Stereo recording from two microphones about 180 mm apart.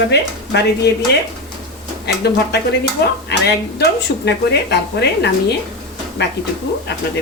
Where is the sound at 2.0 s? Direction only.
65° left (ahead or behind).